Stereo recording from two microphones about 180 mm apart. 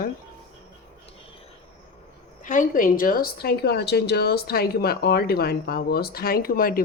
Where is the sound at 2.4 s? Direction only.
45° left (ahead or behind).